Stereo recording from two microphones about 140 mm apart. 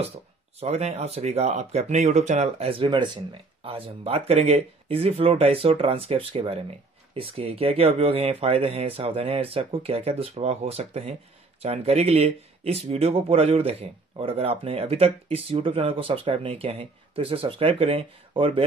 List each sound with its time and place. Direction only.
0.6 s speech: 50° right (ahead or behind)